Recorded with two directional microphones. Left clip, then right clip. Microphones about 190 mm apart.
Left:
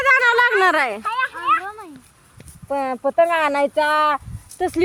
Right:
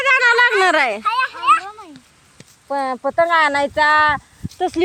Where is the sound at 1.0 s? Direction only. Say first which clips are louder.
Right 4 dB; 65° right (ahead or behind).